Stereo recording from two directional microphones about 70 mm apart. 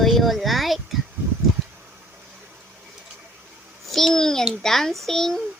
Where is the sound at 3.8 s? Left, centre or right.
Centre.